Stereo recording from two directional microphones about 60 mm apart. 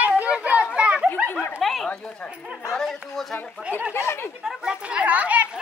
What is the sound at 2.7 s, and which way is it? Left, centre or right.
Speech, centre.